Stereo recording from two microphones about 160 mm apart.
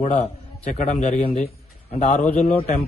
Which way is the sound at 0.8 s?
50° left (ahead or behind).